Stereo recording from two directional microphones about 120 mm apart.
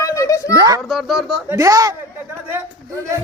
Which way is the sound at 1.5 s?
30° right (ahead or behind).